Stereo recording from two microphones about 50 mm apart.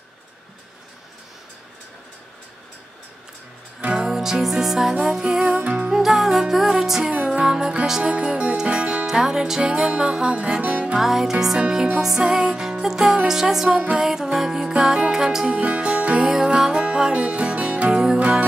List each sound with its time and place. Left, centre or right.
3.9 s music: centre
5.4 s music: right
5.9 s music: centre
8.0 s speech: right
8.6 s music: right
9.0 s music: centre
10.9 s music: centre